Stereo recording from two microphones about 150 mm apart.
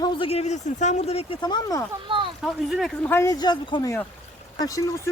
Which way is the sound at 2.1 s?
35° right (ahead or behind).